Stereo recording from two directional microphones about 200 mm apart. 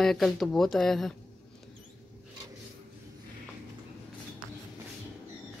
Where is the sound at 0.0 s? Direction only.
Centre (ahead or behind).